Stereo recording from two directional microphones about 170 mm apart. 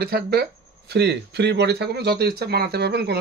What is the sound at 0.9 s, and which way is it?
Speech, 80° right.